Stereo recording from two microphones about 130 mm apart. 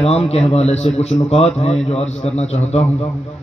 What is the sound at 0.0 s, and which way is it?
A man's voice, 50° left (ahead or behind).